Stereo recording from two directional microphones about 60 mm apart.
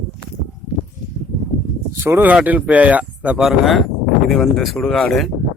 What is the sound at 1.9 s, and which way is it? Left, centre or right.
Speech, right.